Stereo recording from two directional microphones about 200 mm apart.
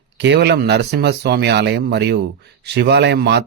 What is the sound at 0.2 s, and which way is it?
Speech, 60° right (ahead or behind).